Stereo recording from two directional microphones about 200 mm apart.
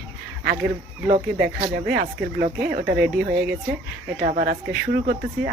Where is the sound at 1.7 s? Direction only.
55° right (ahead or behind).